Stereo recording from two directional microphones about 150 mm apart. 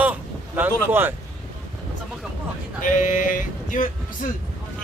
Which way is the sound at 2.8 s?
60° left (ahead or behind).